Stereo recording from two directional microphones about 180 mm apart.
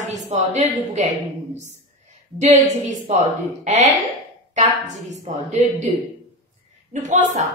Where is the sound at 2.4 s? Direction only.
40° right (ahead or behind).